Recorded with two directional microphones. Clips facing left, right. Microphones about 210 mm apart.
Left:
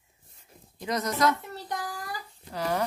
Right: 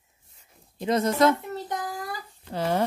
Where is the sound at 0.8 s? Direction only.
25° right (ahead or behind).